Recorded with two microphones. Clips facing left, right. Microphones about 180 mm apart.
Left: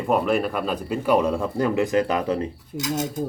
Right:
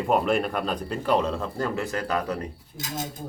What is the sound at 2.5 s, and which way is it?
Speech, 70° left (ahead or behind).